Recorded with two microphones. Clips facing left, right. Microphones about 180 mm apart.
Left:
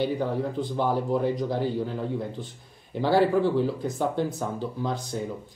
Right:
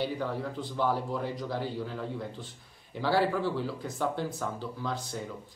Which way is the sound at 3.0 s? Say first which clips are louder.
Left 6 dB; 20° left (ahead or behind).